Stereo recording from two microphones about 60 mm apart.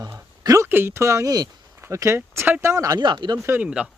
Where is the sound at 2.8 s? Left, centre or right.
Right.